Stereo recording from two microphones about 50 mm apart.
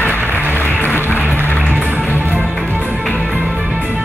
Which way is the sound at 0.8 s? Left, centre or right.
Left.